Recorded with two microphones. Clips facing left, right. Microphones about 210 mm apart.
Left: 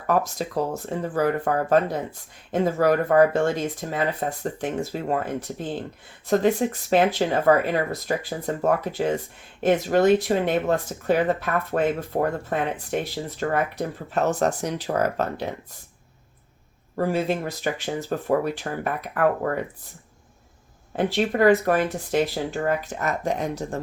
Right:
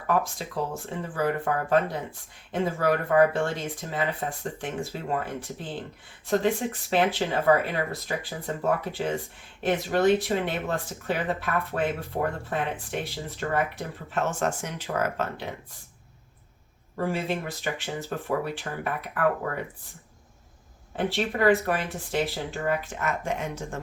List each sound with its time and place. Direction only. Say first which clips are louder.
0.1 s speech: left 4 dB; 40° left (ahead or behind)
17.0 s speech: left 5 dB; 40° left (ahead or behind)
20.9 s speech: left 5 dB; 40° left (ahead or behind)